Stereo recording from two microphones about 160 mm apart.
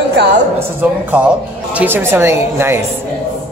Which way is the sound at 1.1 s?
10° right (ahead or behind).